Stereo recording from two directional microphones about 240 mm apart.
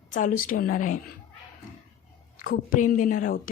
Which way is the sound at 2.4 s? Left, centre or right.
Left.